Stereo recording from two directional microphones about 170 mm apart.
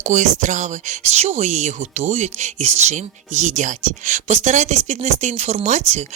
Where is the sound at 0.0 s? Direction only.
45° right (ahead or behind).